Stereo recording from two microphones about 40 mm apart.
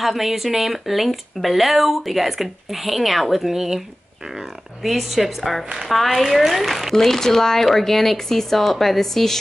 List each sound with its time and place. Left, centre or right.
0.0 s speech: centre
4.8 s speech: centre
7.1 s speech: centre